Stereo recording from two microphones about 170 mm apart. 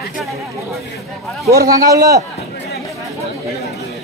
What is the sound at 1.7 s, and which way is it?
Speech, 20° right (ahead or behind).